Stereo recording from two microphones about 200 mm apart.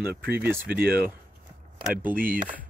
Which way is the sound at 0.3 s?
10° right (ahead or behind).